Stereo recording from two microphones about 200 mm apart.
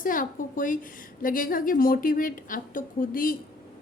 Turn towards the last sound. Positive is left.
turn(degrees=45)  # may be behind; listen again after turning